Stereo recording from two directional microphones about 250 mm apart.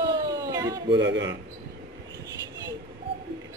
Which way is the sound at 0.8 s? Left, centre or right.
Right.